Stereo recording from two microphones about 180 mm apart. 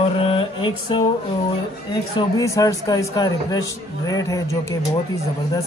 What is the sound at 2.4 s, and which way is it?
A man's voice, 20° left (ahead or behind).